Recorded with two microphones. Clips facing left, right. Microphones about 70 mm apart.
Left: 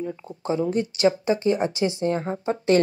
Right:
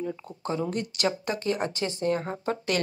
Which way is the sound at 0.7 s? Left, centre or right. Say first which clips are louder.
Left 7 dB; left.